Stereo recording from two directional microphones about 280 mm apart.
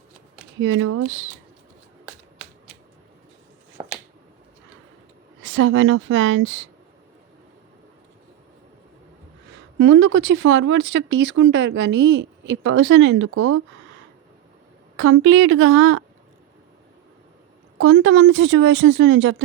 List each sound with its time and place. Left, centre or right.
0.6 s speech: right
3.8 s finger snapping: centre
5.4 s speech: right
9.7 s speech: right
14.9 s speech: right
17.7 s speech: right